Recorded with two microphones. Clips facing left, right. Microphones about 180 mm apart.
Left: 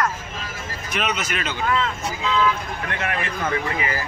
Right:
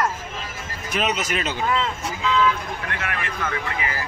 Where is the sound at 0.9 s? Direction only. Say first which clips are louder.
Right 2 dB; 35° right (ahead or behind).